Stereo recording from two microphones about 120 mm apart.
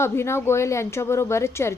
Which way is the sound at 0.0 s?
20° left (ahead or behind).